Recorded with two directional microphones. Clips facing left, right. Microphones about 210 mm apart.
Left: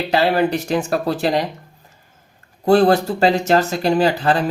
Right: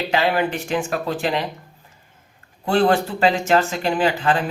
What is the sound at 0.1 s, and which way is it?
Speech, 40° left (ahead or behind).